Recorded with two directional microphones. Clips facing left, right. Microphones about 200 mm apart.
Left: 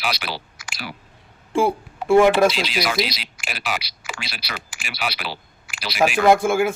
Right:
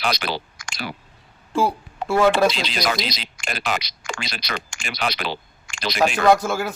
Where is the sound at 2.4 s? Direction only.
5° left (ahead or behind).